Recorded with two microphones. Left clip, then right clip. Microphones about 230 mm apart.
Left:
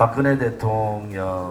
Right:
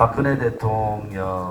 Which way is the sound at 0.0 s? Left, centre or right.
Left.